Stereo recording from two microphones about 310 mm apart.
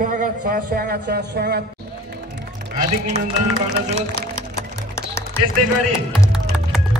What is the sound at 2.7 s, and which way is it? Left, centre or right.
Speech, right.